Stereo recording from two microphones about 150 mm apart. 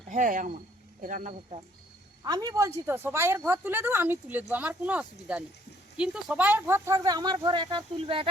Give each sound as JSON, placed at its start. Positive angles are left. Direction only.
{"t": 0.1, "sound": "speech", "side_deg": -60}
{"t": 2.2, "sound": "a woman's voice", "side_deg": -25}